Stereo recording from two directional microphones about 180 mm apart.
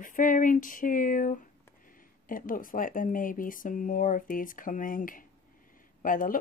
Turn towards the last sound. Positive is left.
turn(degrees=50)  # may be behind; listen again after turning